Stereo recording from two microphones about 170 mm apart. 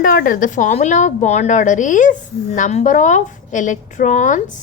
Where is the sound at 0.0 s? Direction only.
55° left (ahead or behind).